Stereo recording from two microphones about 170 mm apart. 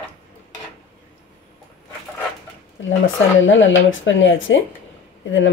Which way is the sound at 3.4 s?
90° left.